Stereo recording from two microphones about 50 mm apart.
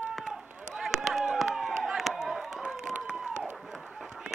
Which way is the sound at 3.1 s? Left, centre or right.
Centre.